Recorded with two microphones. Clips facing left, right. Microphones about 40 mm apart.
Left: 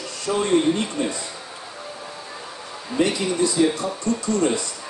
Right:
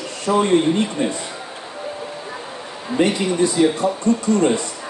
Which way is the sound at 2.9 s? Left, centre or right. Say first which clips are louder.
Right 3 dB; right.